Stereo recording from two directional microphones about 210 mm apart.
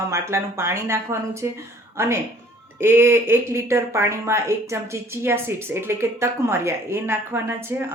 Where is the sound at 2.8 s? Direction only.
10° right (ahead or behind).